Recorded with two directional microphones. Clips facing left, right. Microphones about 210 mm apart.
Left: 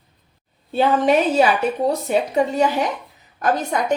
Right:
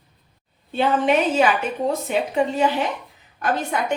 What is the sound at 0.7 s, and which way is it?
Speech, 40° left (ahead or behind).